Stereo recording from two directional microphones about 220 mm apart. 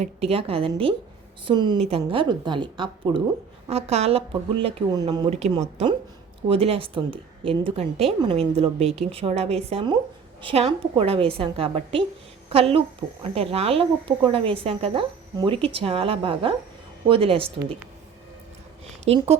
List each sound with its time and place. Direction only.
0.0 s speech: 25° right (ahead or behind)
19.0 s speech: 30° right (ahead or behind)